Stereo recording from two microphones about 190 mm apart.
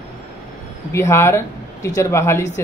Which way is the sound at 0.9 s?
10° left (ahead or behind).